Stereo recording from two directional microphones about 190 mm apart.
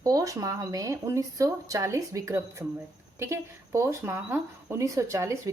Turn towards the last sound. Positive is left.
turn(degrees=-15)  # may be behind; listen again after turning